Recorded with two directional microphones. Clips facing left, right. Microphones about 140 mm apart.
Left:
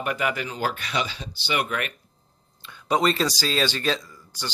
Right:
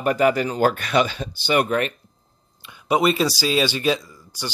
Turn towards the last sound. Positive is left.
turn(degrees=-10)  # may be behind; listen again after turning